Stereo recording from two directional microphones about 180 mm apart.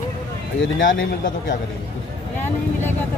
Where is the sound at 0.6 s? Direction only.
90° left.